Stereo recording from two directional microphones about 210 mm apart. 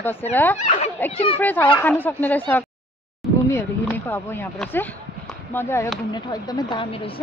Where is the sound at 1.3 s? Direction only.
10° left (ahead or behind); by 7.2 s 25° left (ahead or behind).